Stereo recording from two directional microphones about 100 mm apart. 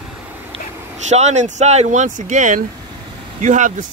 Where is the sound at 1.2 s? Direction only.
90° right.